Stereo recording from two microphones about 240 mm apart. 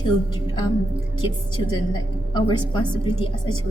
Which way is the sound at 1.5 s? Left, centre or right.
Centre.